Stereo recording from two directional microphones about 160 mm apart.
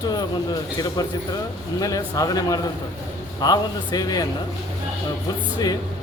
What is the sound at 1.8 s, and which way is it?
Speech, 20° left (ahead or behind).